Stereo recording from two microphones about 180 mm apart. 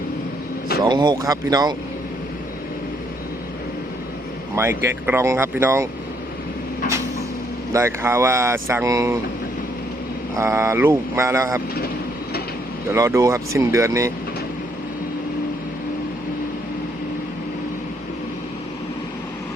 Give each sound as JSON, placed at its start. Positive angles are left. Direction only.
{"t": 0.9, "sound": "speech", "side_deg": -25}
{"t": 4.5, "sound": "speech", "side_deg": -15}
{"t": 7.7, "sound": "speech", "side_deg": -15}
{"t": 10.3, "sound": "speech", "side_deg": -15}
{"t": 12.9, "sound": "speech", "side_deg": -15}